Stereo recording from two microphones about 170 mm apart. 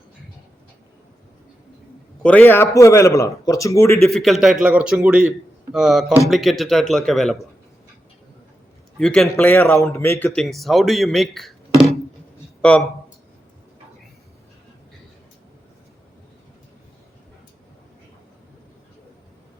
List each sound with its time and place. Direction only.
2.2 s a man's voice: 10° left (ahead or behind)
4.0 s a man's voice: centre (ahead or behind)
9.0 s a man's voice: 5° left (ahead or behind)